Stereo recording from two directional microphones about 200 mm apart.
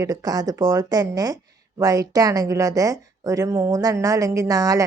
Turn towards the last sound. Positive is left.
turn(degrees=-15)  # may be behind; listen again after turning